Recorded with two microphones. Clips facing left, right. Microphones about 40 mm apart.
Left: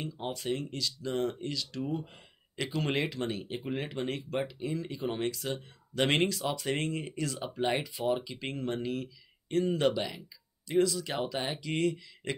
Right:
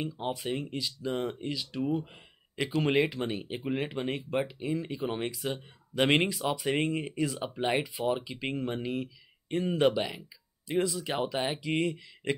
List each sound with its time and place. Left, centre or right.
0.0 s speech: centre